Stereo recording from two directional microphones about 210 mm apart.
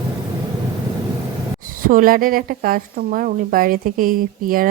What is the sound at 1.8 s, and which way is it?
Speech, 40° right (ahead or behind).